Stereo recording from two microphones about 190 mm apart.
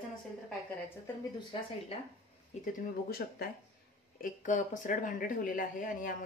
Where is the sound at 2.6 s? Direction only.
50° left (ahead or behind).